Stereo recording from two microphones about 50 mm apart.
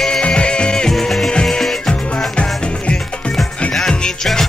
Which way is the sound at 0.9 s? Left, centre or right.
Centre.